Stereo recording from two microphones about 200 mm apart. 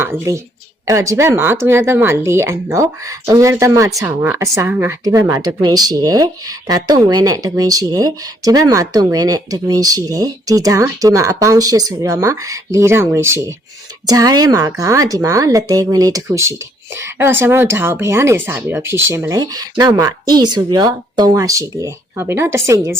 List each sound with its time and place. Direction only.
0.0 s a woman's voice: 10° right (ahead or behind)